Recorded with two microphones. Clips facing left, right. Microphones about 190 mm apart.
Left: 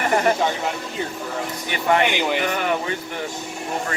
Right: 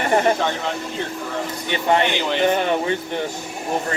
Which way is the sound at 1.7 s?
25° right (ahead or behind).